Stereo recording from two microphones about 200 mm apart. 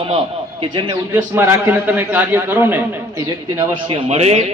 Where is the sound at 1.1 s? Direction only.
10° right (ahead or behind).